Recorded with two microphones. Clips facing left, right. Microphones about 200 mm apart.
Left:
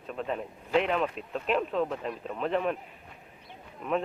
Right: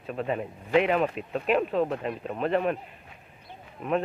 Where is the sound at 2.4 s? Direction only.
5° right (ahead or behind).